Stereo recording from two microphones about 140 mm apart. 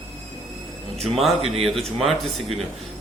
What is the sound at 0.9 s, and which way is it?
Speech, 50° right (ahead or behind).